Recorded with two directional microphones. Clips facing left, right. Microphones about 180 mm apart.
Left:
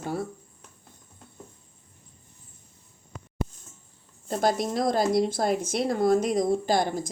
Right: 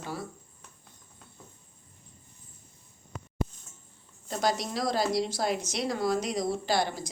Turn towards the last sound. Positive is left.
turn(degrees=50)  # may be behind; listen again after turning